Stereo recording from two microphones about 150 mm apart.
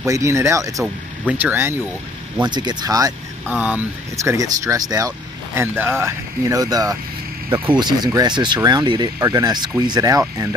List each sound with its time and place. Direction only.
0.0 s speech: 20° right (ahead or behind)
2.4 s speech: 30° right (ahead or behind)
3.4 s speech: 10° right (ahead or behind)
7.4 s speech: 15° right (ahead or behind)
7.8 s speech: 25° right (ahead or behind)